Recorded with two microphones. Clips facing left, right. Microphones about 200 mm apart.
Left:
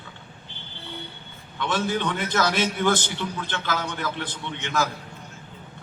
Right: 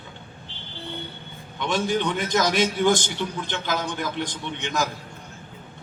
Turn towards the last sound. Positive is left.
turn(degrees=-15)  # may be behind; listen again after turning